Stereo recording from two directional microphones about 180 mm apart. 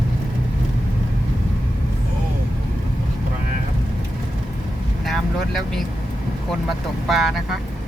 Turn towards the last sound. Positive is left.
turn(degrees=0)  # may be behind; listen again after turning